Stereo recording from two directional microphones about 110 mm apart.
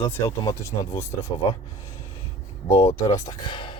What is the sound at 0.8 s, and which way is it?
Speech, 30° left (ahead or behind).